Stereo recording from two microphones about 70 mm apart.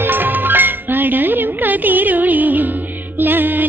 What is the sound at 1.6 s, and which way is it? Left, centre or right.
Music, right.